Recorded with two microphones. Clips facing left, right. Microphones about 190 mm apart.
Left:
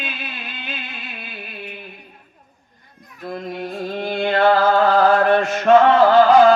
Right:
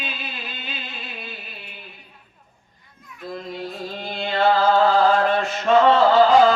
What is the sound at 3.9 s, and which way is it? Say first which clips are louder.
Music: left 7 dB; 55° left (ahead or behind).